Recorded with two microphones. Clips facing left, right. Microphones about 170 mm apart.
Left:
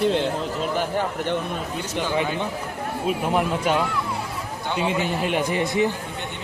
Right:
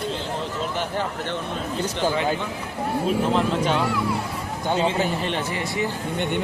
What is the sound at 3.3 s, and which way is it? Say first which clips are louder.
Speech: even; 10° left (ahead or behind).